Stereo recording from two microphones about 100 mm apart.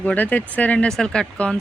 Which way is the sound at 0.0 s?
15° left (ahead or behind).